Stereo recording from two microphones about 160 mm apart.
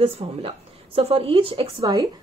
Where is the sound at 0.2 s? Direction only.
40° right (ahead or behind).